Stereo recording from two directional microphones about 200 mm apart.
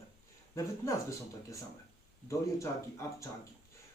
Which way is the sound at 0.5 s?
15° left (ahead or behind).